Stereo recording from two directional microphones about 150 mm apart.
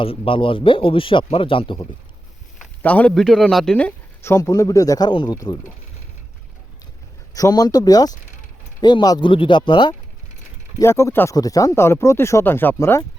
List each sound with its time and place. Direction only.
0.0 s speech: 35° left (ahead or behind)
2.8 s speech: 10° left (ahead or behind); by 5.5 s 25° left (ahead or behind)
7.3 s speech: 25° left (ahead or behind)
10.8 s speech: 20° left (ahead or behind)